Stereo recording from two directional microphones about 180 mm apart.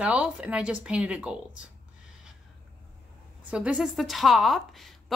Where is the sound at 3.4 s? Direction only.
5° right (ahead or behind).